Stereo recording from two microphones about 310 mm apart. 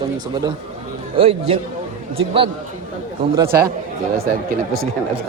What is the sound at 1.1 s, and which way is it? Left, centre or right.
Speech, centre.